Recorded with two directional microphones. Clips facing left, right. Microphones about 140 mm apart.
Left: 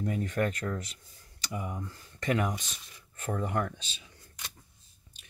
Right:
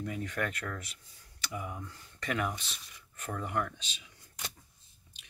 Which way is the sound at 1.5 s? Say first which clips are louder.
Left 3 dB; 25° left (ahead or behind).